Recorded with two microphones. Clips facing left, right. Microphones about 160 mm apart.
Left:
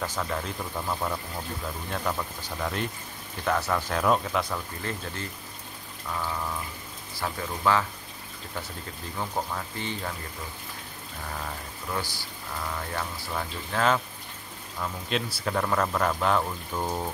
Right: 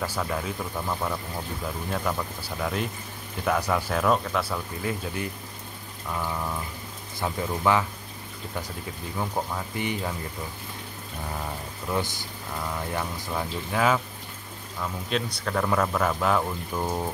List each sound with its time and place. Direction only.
0.0 s speech: 5° right (ahead or behind)
4.0 s speech: 5° left (ahead or behind)
4.5 s speech: 10° right (ahead or behind)
7.2 s speech: 15° right (ahead or behind)
9.8 s speech: 15° right (ahead or behind)
11.9 s speech: 20° right (ahead or behind); by 17.1 s 5° right (ahead or behind)